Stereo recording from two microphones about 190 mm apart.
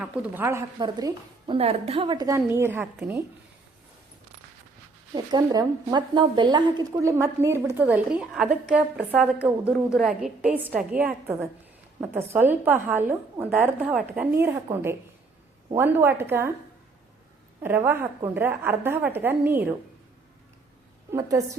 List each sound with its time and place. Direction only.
0.0 s a woman's voice: 10° right (ahead or behind)
5.1 s a woman's voice: 20° right (ahead or behind)
17.6 s a woman's voice: 10° right (ahead or behind)
21.1 s a woman's voice: 15° right (ahead or behind)